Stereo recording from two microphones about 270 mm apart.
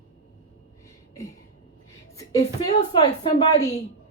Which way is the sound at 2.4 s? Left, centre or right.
Left.